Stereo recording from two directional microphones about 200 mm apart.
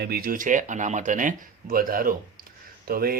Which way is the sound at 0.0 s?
50° right (ahead or behind).